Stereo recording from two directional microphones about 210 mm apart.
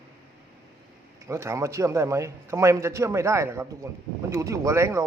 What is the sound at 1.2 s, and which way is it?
A man's voice, 15° right (ahead or behind).